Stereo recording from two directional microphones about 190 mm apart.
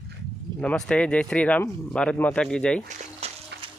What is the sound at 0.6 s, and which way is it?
Speech, 5° left (ahead or behind).